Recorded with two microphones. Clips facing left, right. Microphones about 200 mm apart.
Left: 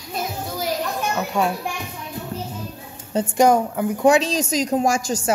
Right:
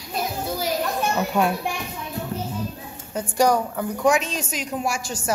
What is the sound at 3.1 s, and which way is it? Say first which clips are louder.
A woman's voice: left 4 dB; 25° left (ahead or behind).